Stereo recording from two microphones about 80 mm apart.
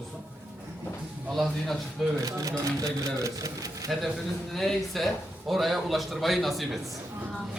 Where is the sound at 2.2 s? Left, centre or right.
Right.